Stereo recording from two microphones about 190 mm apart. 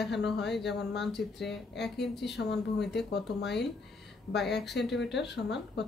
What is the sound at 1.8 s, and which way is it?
Speech, 60° left (ahead or behind).